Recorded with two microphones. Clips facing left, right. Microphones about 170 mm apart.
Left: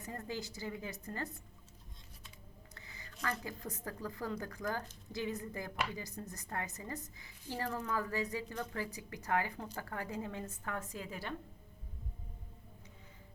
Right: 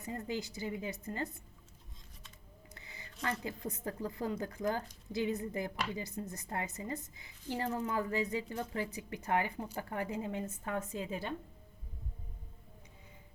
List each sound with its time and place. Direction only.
0.0 s a woman's voice: 20° right (ahead or behind)
2.7 s a sound: 20° right (ahead or behind)
3.4 s a woman's voice: 20° right (ahead or behind)